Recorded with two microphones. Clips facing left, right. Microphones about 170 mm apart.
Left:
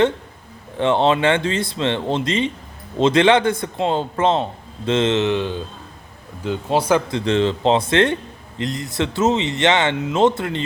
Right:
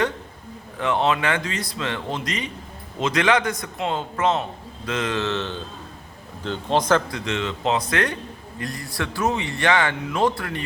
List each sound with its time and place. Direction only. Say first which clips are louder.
0.8 s a man's voice: left 5 dB; 30° left (ahead or behind); by 7.0 s 10° left (ahead or behind)
7.1 s a man's voice: left 8 dB; 30° left (ahead or behind)